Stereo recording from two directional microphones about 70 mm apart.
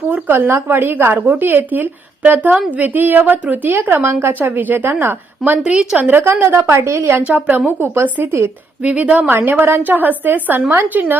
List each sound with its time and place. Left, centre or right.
0.1 s a woman's voice: right
5.6 s speech: centre
6.0 s a woman's voice: right
6.2 s a woman's voice: right
7.2 s a woman's voice: right
8.8 s a woman's voice: centre
9.3 s a woman's voice: right